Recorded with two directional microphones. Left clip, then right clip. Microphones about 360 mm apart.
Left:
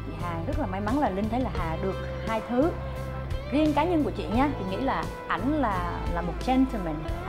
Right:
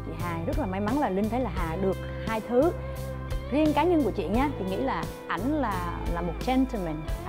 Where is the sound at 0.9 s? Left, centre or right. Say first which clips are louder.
Even; right.